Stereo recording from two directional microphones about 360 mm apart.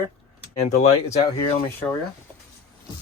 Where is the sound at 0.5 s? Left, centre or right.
Centre.